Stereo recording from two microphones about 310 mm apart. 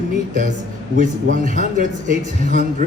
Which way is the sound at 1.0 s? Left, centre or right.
Right.